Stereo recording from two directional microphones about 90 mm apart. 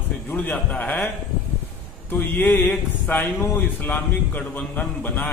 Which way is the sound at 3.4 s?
20° left (ahead or behind).